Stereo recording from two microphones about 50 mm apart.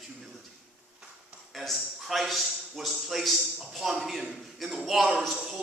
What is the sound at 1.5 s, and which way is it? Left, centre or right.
A man's voice, centre.